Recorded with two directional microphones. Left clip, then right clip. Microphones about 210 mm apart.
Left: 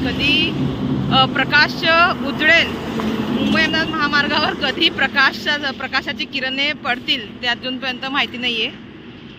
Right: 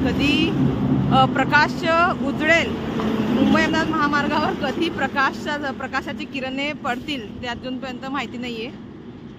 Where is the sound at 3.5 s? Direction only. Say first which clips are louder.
Left 4 dB; 15° right (ahead or behind); by 8.7 s centre (ahead or behind).